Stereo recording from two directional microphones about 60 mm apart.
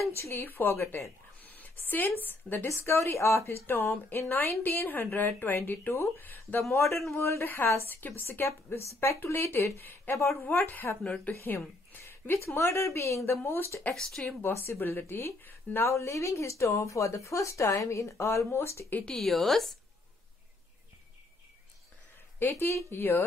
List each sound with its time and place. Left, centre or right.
0.1 s a woman's voice: left
1.4 s a sound: left
2.2 s a woman's voice: left
2.7 s a woman's voice: left
6.7 s a woman's voice: left
13.9 s speech: centre
14.8 s a woman's voice: left
15.9 s speech: left
19.0 s a woman's voice: centre
22.4 s a woman's voice: left